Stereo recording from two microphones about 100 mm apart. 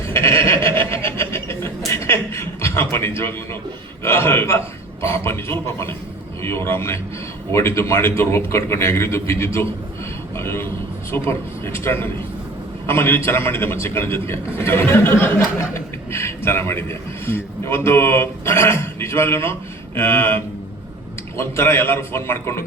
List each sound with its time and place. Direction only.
0.1 s a sound: 25° left (ahead or behind)
1.9 s chuckle: 25° left (ahead or behind)
4.0 s speech: 25° left (ahead or behind)